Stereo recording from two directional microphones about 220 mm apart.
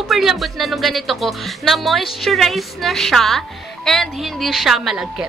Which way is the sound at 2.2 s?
Centre (ahead or behind).